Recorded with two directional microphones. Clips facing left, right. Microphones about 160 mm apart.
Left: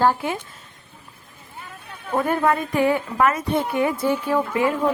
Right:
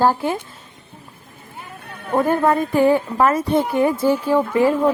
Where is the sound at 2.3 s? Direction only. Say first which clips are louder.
Right 3 dB; 30° right (ahead or behind).